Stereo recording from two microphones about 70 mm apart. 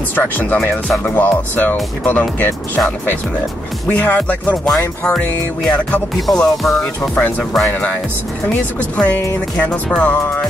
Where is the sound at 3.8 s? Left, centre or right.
Left.